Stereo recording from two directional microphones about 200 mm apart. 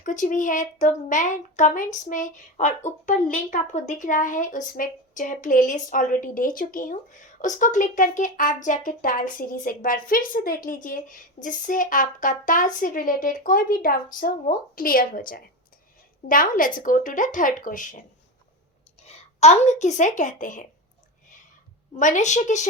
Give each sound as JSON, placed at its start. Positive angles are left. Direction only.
{"t": 0.0, "sound": "speech", "side_deg": 40}
{"t": 19.0, "sound": "a woman's voice", "side_deg": 35}
{"t": 21.9, "sound": "speech", "side_deg": 40}